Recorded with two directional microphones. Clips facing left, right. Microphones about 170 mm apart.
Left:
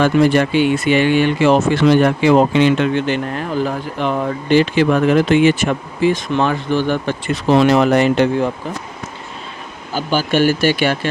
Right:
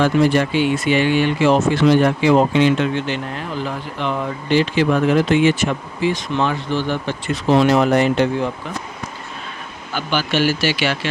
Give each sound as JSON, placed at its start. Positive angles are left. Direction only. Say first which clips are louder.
{"t": 0.0, "sound": "speech", "louder": "left 2 dB", "side_deg": 60}
{"t": 3.6, "sound": "speech", "louder": "left 5 dB", "side_deg": 45}
{"t": 7.7, "sound": "speech", "louder": "left 2 dB", "side_deg": 75}
{"t": 9.9, "sound": "speech", "louder": "left 4 dB", "side_deg": 40}